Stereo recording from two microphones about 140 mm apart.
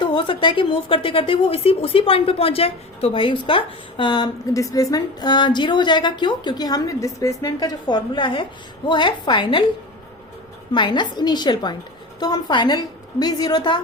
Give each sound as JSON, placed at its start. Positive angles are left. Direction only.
{"t": 0.0, "sound": "a woman's voice", "side_deg": 35}
{"t": 10.7, "sound": "a woman's voice", "side_deg": 35}